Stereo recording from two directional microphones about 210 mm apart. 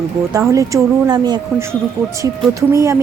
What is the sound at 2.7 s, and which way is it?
Speech, 15° right (ahead or behind).